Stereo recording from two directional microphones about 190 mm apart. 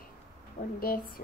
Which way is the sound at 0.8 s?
50° left (ahead or behind).